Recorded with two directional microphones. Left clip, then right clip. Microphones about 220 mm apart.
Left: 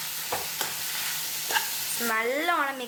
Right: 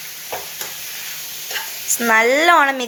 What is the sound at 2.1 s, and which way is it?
Speech, 35° right (ahead or behind).